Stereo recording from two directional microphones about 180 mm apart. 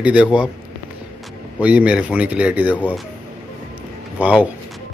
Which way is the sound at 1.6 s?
10° right (ahead or behind).